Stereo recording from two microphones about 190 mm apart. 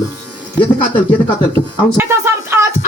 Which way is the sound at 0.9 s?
10° left (ahead or behind).